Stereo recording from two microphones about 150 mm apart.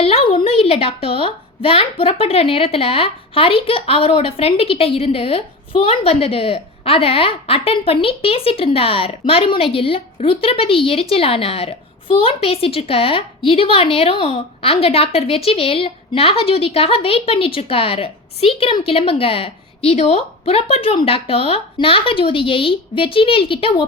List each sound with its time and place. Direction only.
0.0 s a woman's voice: 40° left (ahead or behind)